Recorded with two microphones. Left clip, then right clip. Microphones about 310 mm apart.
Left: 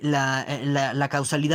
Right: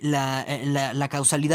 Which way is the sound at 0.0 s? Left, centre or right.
Centre.